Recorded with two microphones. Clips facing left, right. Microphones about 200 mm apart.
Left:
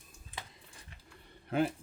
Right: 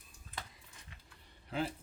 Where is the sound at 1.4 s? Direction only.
55° left (ahead or behind).